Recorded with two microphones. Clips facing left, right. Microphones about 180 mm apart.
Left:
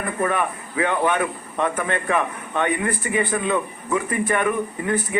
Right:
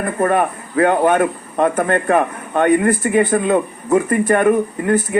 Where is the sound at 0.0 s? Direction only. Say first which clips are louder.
Right 6 dB; 45° right (ahead or behind).